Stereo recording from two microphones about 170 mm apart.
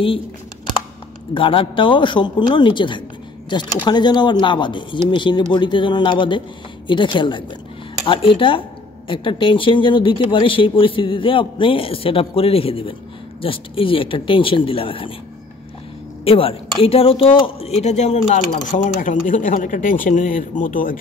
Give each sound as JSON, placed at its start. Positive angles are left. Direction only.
{"t": 1.3, "sound": "speech", "side_deg": 30}
{"t": 16.3, "sound": "a woman's voice", "side_deg": 35}